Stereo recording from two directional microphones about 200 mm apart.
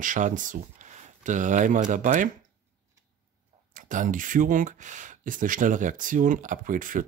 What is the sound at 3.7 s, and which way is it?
Speech, 40° right (ahead or behind).